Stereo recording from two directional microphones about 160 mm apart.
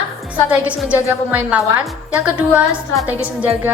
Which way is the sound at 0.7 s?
10° right (ahead or behind).